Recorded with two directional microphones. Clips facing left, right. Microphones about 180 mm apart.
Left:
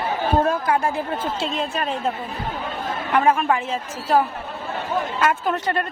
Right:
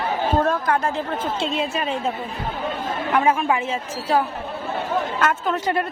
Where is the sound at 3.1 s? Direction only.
Centre (ahead or behind).